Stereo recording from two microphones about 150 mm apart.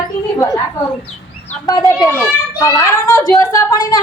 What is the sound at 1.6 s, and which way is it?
A woman's voice, 25° left (ahead or behind).